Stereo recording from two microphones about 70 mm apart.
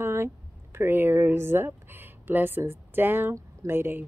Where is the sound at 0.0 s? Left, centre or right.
Right.